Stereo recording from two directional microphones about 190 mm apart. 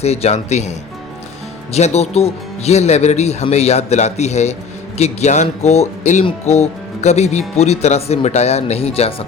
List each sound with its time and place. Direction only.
0.0 s speech: 35° left (ahead or behind)